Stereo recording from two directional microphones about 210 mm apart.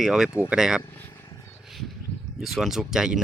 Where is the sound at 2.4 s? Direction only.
Centre (ahead or behind).